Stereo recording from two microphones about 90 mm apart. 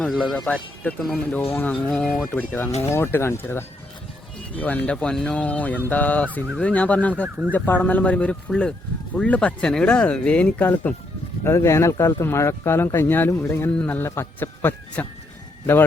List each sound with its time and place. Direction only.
0.0 s speech: 5° left (ahead or behind)
2.3 s speech: 25° left (ahead or behind)
11.4 s speech: 30° left (ahead or behind)